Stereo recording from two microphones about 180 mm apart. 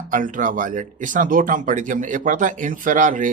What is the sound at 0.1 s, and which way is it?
Speech, 45° right (ahead or behind).